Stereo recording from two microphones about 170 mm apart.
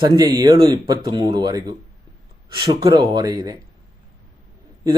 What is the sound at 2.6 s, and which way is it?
Speech, 25° right (ahead or behind).